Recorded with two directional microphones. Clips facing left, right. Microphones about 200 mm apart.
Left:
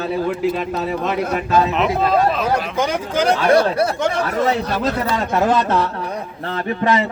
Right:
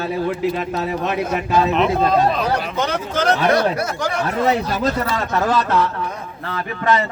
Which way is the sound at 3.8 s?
30° left (ahead or behind).